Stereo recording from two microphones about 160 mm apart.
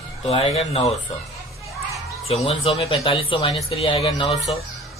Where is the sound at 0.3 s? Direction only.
35° left (ahead or behind).